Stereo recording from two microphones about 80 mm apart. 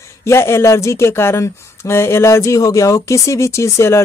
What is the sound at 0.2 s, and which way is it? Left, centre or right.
Speech, left.